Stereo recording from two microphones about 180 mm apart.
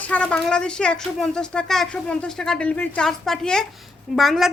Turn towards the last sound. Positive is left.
turn(degrees=0)  # may be behind; listen again after turning